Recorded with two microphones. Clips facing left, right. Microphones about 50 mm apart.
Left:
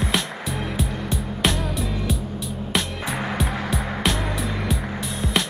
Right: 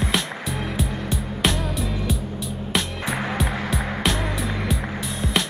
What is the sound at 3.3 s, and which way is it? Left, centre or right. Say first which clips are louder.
Music: even; centre.